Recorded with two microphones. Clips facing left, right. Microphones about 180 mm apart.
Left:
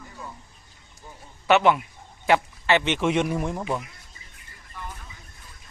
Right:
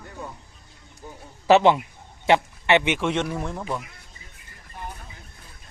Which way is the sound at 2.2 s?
20° right (ahead or behind).